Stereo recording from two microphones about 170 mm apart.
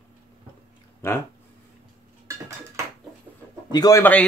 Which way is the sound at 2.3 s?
15° right (ahead or behind).